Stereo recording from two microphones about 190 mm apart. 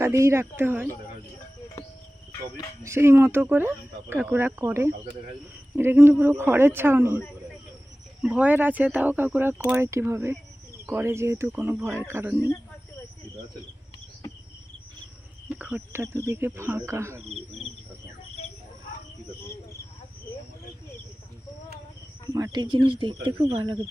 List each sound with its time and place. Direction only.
0.0 s speech: 15° right (ahead or behind)
2.8 s speech: 15° right (ahead or behind)
8.2 s speech: 5° right (ahead or behind)
15.4 s speech: 5° right (ahead or behind)
17.2 s cricket: centre (ahead or behind)
22.3 s speech: 20° right (ahead or behind)